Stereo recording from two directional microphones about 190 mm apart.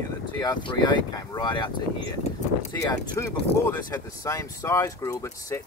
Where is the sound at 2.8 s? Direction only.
15° left (ahead or behind).